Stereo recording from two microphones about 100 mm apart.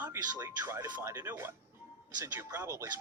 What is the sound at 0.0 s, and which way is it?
Speech, 25° right (ahead or behind).